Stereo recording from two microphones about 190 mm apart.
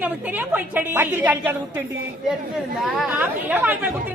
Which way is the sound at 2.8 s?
5° right (ahead or behind).